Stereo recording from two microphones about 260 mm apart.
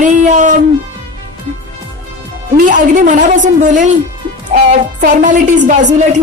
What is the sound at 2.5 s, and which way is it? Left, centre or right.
A woman's voice, right.